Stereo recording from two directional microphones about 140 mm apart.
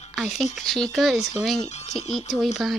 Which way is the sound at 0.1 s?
Centre (ahead or behind).